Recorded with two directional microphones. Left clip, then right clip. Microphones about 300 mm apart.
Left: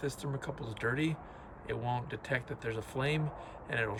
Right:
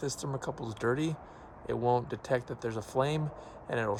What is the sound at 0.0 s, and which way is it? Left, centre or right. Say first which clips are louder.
Speech: right 3 dB; centre.